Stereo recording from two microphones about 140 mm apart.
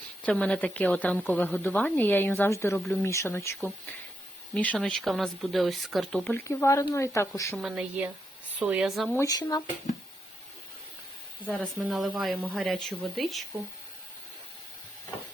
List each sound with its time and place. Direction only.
0.2 s speech: 10° left (ahead or behind)
6.3 s speech: 20° left (ahead or behind)
7.6 s a woman's voice: 10° right (ahead or behind)
9.2 s speech: 25° left (ahead or behind)
11.4 s speech: 5° left (ahead or behind)